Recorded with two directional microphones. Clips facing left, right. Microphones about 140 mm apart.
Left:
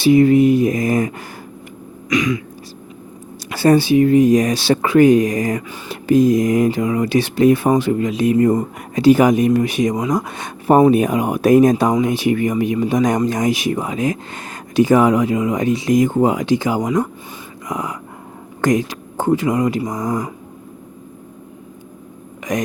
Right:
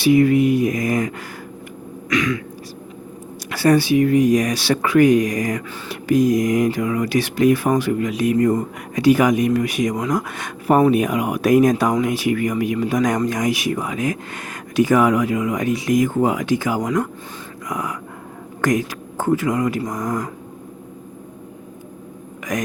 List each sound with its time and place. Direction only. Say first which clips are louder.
0.0 s speech: left 3 dB; 30° left (ahead or behind)
2.0 s speech: left 2 dB; 15° left (ahead or behind)
3.5 s speech: left 3 dB; 25° left (ahead or behind)
22.5 s speech: left 3 dB; 25° left (ahead or behind)